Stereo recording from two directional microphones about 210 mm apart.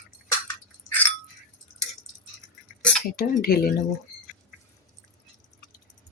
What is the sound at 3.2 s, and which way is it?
Speech, 45° left (ahead or behind).